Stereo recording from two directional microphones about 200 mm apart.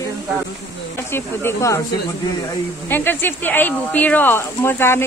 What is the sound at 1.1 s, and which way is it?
Speech, 15° left (ahead or behind).